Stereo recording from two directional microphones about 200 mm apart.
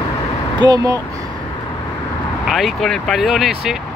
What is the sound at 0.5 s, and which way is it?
Speech, 20° right (ahead or behind).